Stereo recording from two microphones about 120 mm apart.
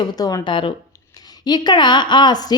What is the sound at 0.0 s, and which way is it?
A woman's voice, 30° left (ahead or behind).